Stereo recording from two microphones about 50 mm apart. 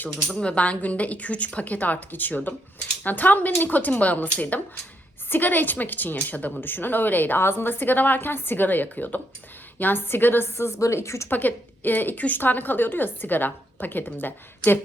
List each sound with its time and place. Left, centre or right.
0.0 s a woman's voice: left
10.7 s a woman's voice: left
11.3 s a woman's voice: left